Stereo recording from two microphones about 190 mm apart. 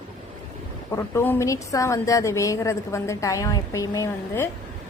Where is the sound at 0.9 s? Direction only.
15° left (ahead or behind).